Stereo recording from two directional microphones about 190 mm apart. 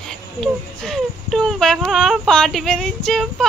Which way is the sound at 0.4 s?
Centre (ahead or behind).